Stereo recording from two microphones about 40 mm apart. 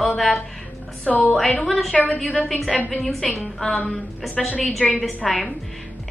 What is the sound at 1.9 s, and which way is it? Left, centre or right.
Speech, left.